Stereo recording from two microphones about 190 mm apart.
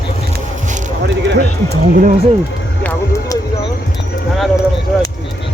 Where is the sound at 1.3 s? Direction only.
55° right (ahead or behind).